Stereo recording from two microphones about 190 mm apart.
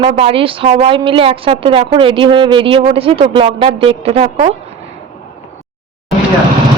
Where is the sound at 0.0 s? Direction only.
30° right (ahead or behind).